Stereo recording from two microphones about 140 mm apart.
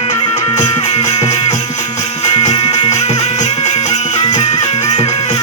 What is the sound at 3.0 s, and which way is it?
Music, 50° left (ahead or behind).